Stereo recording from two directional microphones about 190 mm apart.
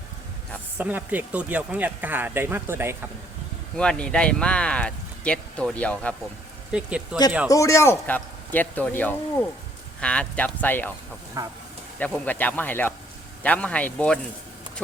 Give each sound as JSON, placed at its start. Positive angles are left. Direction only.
{"t": 0.8, "sound": "speech", "side_deg": -10}
{"t": 3.8, "sound": "speech", "side_deg": 5}
{"t": 6.7, "sound": "speech", "side_deg": -5}
{"t": 7.4, "sound": "a man's voice", "side_deg": 15}
{"t": 11.4, "sound": "speech", "side_deg": -20}
{"t": 11.9, "sound": "a man's voice", "side_deg": 10}